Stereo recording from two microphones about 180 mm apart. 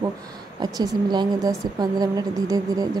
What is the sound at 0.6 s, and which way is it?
A woman's voice, 25° right (ahead or behind).